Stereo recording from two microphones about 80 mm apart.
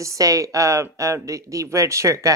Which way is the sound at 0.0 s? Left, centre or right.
Right.